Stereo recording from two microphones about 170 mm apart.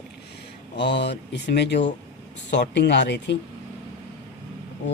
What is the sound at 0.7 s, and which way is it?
Speech, 90° left.